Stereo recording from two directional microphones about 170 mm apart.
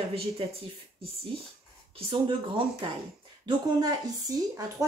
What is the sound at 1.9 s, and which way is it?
Speech, 30° right (ahead or behind).